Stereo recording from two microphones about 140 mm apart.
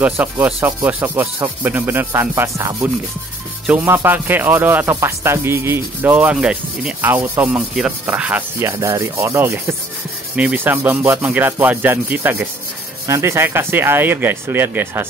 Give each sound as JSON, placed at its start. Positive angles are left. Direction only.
{"t": 0.0, "sound": "speech", "side_deg": -10}